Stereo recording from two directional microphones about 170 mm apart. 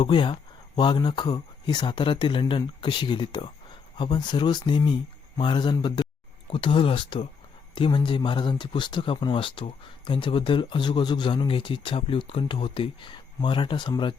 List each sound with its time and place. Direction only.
0.0 s speech: 30° left (ahead or behind)